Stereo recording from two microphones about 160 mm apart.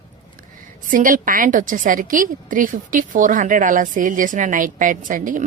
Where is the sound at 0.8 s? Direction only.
55° right (ahead or behind).